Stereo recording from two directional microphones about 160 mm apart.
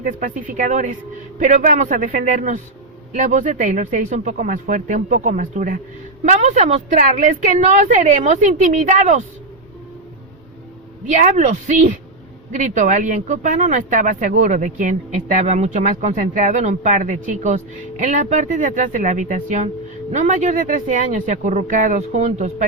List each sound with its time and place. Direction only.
0.0 s speech: 55° right (ahead or behind)
11.1 s speech: 50° right (ahead or behind)